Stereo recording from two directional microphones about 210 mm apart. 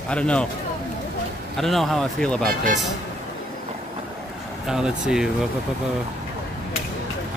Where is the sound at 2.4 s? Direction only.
40° right (ahead or behind).